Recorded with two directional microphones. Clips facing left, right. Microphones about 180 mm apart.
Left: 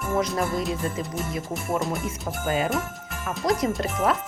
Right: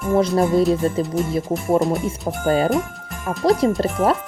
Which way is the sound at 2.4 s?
35° right (ahead or behind).